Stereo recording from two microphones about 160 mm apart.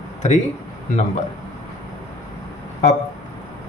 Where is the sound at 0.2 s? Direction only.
45° left (ahead or behind).